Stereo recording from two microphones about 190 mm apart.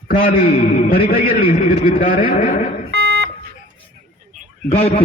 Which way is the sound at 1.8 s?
45° left (ahead or behind).